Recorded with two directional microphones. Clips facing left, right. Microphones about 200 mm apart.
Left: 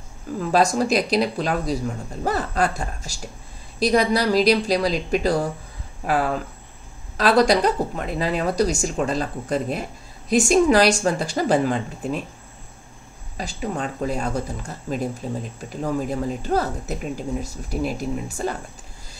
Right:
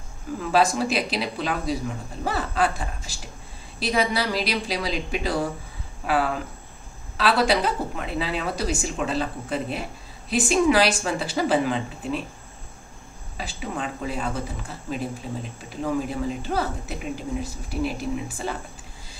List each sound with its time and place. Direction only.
0.5 s speech: 40° left (ahead or behind)
7.2 s speech: 40° left (ahead or behind)
13.4 s speech: 40° left (ahead or behind)